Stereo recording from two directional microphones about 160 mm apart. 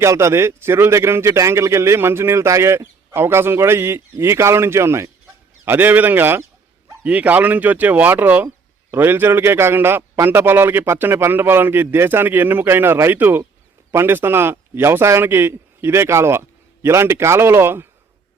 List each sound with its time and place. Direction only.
0.0 s a man's voice: 20° right (ahead or behind)